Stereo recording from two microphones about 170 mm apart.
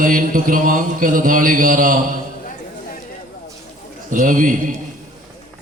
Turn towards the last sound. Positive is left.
turn(degrees=-50)  # may be behind; listen again after turning